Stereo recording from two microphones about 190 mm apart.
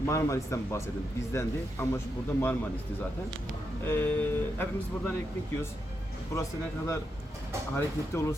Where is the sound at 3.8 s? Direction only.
10° left (ahead or behind).